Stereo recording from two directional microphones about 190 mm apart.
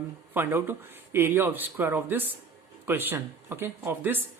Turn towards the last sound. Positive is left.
turn(degrees=-10)  # may be behind; listen again after turning